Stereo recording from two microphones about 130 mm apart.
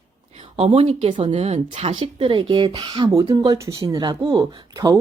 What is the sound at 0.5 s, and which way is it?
Speech, 50° right (ahead or behind).